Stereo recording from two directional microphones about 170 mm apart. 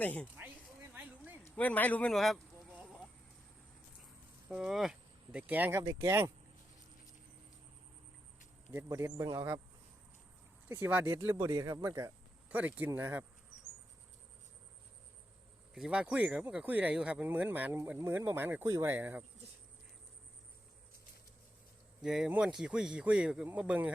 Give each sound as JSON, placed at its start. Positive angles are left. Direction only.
{"t": 0.0, "sound": "speech", "side_deg": 10}
{"t": 0.9, "sound": "a sound", "side_deg": -10}
{"t": 1.5, "sound": "speech", "side_deg": 10}
{"t": 4.4, "sound": "speech", "side_deg": -5}
{"t": 8.7, "sound": "speech", "side_deg": -15}
{"t": 10.7, "sound": "speech", "side_deg": -10}
{"t": 11.3, "sound": "speech", "side_deg": -25}
{"t": 15.7, "sound": "speech", "side_deg": -5}
{"t": 22.0, "sound": "speech", "side_deg": -5}